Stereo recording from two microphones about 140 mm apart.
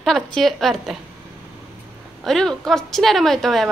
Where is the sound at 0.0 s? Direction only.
5° left (ahead or behind).